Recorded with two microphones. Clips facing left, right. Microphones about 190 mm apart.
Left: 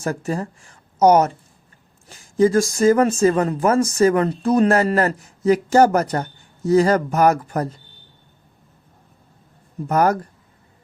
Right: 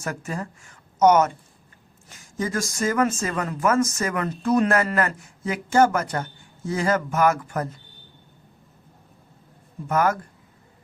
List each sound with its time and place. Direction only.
0.0 s speech: 35° left (ahead or behind)
9.9 s speech: 35° left (ahead or behind)